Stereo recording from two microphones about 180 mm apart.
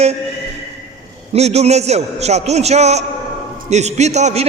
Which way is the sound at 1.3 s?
35° right (ahead or behind).